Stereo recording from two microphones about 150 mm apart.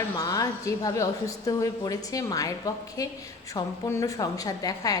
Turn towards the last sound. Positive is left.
turn(degrees=25)  # may be behind; listen again after turning